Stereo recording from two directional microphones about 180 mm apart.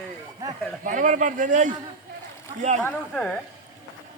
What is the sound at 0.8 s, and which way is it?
Speech, 45° right (ahead or behind).